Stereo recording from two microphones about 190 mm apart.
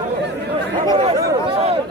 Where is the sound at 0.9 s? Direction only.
20° right (ahead or behind).